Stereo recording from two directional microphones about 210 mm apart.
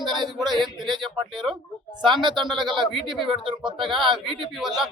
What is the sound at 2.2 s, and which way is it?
Speech, 20° right (ahead or behind).